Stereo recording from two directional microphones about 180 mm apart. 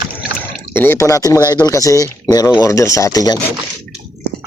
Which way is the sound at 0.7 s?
10° left (ahead or behind).